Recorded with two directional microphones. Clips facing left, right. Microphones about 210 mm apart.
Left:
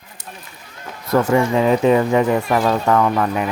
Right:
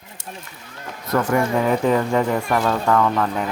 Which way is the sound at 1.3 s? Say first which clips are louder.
Left 3 dB; 20° left (ahead or behind).